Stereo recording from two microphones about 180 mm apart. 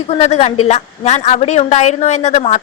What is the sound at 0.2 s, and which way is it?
A woman's voice, 35° left (ahead or behind).